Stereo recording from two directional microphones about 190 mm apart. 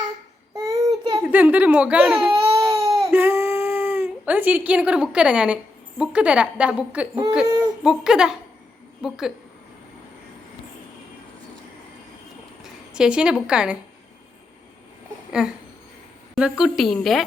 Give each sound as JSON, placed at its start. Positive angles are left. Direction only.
{"t": 0.5, "sound": "child singing", "side_deg": -15}
{"t": 1.2, "sound": "baby cry", "side_deg": -10}
{"t": 6.0, "sound": "a woman's voice", "side_deg": -5}
{"t": 12.9, "sound": "a woman's voice", "side_deg": -5}
{"t": 15.3, "sound": "a woman's voice", "side_deg": -5}